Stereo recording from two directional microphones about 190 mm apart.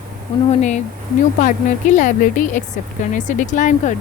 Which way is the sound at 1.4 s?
40° left (ahead or behind).